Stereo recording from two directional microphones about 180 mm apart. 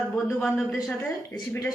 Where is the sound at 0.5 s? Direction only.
Centre (ahead or behind).